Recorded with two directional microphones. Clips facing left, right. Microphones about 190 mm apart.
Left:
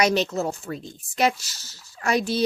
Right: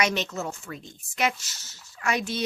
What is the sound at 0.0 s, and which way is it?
Speech, 35° left (ahead or behind).